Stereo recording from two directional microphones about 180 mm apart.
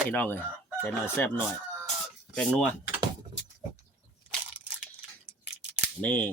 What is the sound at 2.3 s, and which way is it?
Speech, 5° left (ahead or behind).